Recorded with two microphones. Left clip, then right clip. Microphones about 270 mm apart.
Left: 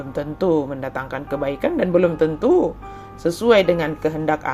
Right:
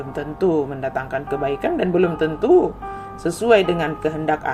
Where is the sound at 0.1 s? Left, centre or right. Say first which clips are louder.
Left 1 dB; centre.